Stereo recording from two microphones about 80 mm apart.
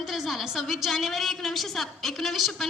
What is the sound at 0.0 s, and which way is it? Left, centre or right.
A woman's voice, centre.